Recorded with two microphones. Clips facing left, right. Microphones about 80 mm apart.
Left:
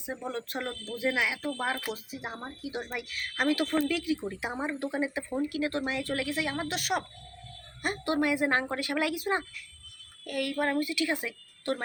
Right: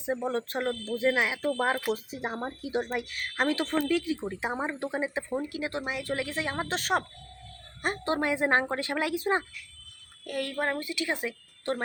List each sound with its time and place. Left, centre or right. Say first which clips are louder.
0.0 s a woman's voice: right 6 dB; right